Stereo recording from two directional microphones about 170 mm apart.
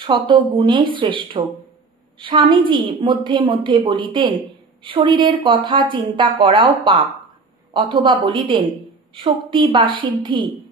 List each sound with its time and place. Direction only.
0.0 s speech: 30° right (ahead or behind)